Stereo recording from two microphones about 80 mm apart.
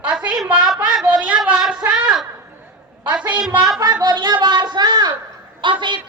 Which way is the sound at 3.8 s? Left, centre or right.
Right.